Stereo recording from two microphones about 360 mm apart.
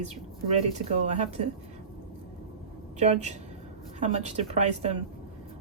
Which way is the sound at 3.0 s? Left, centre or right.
Centre.